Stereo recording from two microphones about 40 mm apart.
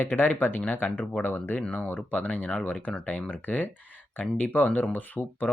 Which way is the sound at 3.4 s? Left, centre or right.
Left.